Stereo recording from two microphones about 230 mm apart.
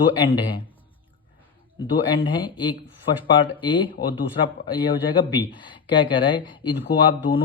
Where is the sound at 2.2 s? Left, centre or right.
Centre.